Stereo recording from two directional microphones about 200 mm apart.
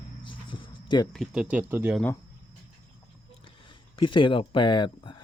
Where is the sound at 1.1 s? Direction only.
Centre (ahead or behind).